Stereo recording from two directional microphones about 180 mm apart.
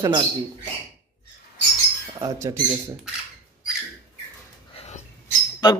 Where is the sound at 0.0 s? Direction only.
20° right (ahead or behind).